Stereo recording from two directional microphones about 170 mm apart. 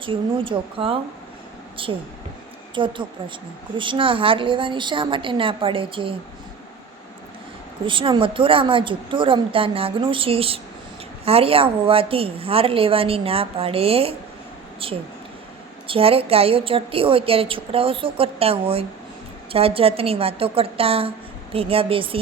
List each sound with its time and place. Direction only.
0.0 s a woman's voice: 30° right (ahead or behind)
7.9 s a woman's voice: 30° right (ahead or behind)